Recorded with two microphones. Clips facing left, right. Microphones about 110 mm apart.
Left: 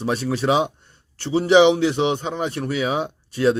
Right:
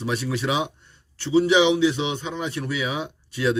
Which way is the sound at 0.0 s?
40° left (ahead or behind).